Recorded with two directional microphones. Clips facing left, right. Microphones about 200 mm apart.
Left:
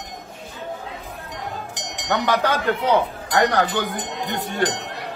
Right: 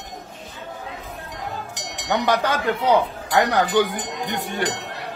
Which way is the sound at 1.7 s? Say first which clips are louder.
Left 1 dB; 20° left (ahead or behind).